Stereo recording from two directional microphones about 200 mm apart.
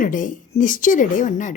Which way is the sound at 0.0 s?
40° left (ahead or behind).